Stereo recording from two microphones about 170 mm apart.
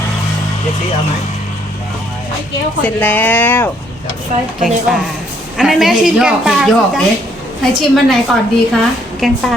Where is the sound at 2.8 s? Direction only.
10° left (ahead or behind).